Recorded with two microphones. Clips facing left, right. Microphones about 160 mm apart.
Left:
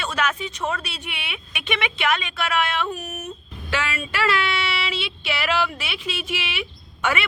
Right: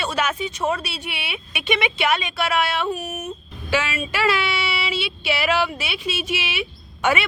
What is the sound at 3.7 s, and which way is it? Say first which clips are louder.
Speech: right 3 dB; 20° right (ahead or behind).